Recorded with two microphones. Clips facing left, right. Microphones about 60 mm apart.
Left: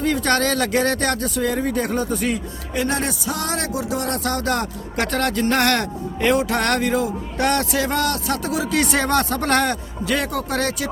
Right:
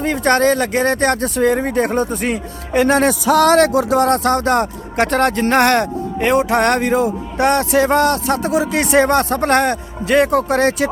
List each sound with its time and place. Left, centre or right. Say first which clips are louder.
0.0 s speech: right 5 dB; right
2.8 s speech: right 10 dB; right